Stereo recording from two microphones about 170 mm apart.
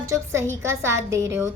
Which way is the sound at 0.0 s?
15° right (ahead or behind).